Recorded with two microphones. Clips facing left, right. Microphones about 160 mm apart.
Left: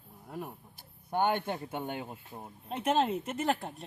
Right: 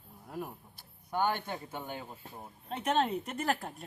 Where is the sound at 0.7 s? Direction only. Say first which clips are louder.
Left 3 dB; 50° left (ahead or behind).